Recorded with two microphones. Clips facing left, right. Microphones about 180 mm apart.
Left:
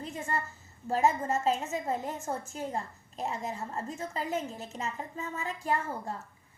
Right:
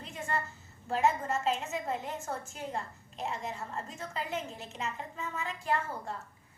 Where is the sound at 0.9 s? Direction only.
40° left (ahead or behind).